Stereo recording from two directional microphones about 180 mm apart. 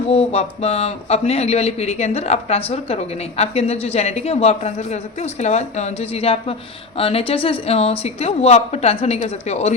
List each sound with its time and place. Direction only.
0.1 s a man's voice: 35° left (ahead or behind)